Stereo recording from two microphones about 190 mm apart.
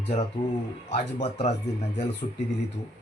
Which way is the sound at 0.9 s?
40° left (ahead or behind).